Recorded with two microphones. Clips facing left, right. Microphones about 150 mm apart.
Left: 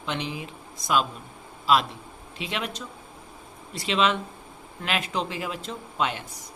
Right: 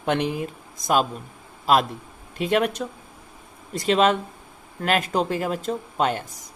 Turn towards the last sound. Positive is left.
turn(degrees=-45)  # may be behind; listen again after turning